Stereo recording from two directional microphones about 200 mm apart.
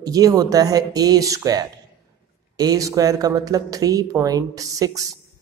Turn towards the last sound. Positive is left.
turn(degrees=-15)  # may be behind; listen again after turning